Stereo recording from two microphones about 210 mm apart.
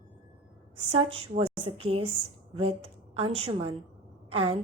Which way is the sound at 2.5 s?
25° right (ahead or behind).